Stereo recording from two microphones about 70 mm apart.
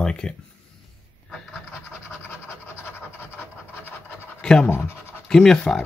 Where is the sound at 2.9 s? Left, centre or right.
Left.